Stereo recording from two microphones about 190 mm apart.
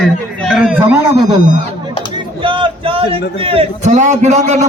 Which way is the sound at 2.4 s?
25° right (ahead or behind).